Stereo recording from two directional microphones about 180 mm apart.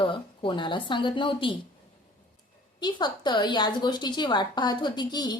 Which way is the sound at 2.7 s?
25° left (ahead or behind).